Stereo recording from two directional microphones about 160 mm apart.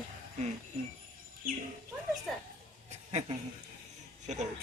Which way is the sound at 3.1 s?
40° right (ahead or behind).